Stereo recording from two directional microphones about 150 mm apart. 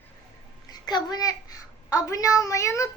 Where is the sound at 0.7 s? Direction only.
25° left (ahead or behind).